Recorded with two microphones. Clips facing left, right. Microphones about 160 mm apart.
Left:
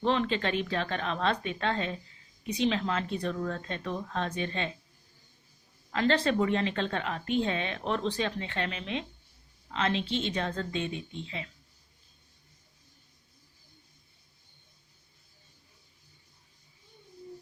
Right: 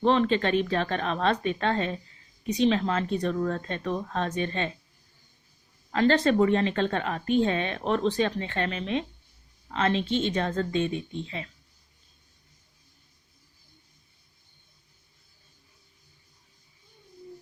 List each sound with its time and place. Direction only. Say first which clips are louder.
0.0 s a woman's voice: right 5 dB; 40° right (ahead or behind)
5.9 s a woman's voice: right 5 dB; 40° right (ahead or behind)